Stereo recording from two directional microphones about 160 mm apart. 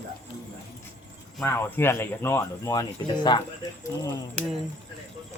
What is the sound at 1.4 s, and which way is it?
Speech, 15° left (ahead or behind).